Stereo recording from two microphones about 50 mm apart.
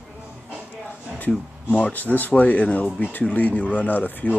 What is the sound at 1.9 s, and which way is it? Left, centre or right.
Speech, left.